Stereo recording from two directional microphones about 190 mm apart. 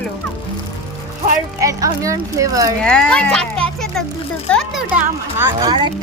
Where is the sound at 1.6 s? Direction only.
20° right (ahead or behind).